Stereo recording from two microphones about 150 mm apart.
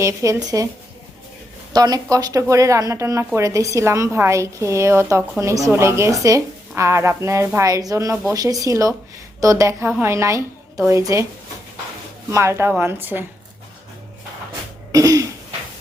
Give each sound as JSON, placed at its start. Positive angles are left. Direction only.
{"t": 0.0, "sound": "speech", "side_deg": -20}
{"t": 1.7, "sound": "speech", "side_deg": -25}
{"t": 12.3, "sound": "a woman's voice", "side_deg": -20}
{"t": 14.9, "sound": "throat clearing", "side_deg": -25}